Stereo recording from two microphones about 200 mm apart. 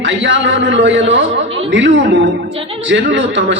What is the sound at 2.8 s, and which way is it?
Speech, 65° right (ahead or behind).